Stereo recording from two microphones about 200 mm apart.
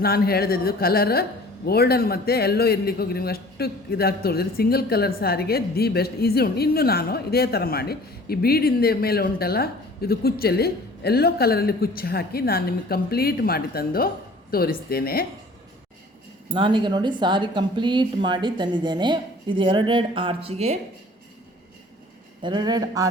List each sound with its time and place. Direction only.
0.0 s a man's voice: 50° left (ahead or behind)
16.6 s a woman's voice: 25° right (ahead or behind)
22.4 s a woman's voice: 20° right (ahead or behind)